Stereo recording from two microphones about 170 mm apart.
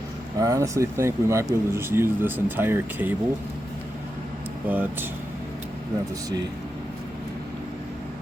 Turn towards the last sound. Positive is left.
turn(degrees=-20)  # may be behind; listen again after turning